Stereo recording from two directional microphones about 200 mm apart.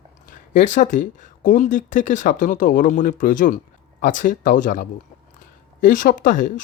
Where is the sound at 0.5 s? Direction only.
40° left (ahead or behind).